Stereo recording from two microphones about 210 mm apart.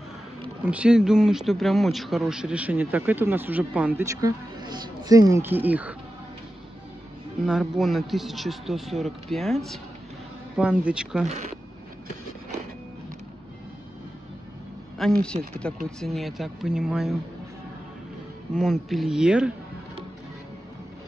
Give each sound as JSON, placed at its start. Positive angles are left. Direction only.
{"t": 0.7, "sound": "speech", "side_deg": -5}
{"t": 7.4, "sound": "speech", "side_deg": 0}
{"t": 11.2, "sound": "speech", "side_deg": -30}
{"t": 15.0, "sound": "speech", "side_deg": 0}
{"t": 18.5, "sound": "speech", "side_deg": 0}